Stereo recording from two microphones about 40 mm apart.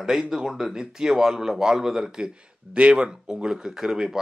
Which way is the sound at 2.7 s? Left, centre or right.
Right.